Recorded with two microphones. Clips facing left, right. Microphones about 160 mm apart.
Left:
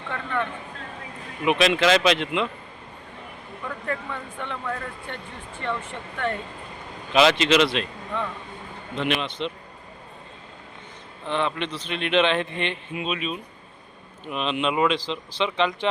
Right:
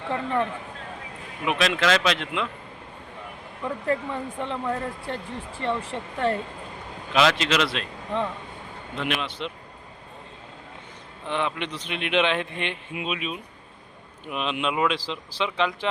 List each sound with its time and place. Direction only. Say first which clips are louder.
0.1 s speech: right 3 dB; 35° right (ahead or behind)
1.5 s speech: left 3 dB; centre (ahead or behind)
3.8 s speech: right 5 dB; 30° right (ahead or behind)
7.1 s speech: left 3 dB; centre (ahead or behind)
9.0 s speech: left 3 dB; 5° right (ahead or behind)
11.3 s speech: left 2 dB; 10° right (ahead or behind)